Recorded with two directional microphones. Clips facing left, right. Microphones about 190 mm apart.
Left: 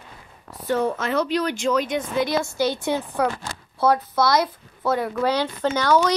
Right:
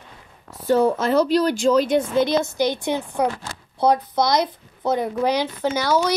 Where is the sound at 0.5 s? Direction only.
30° right (ahead or behind).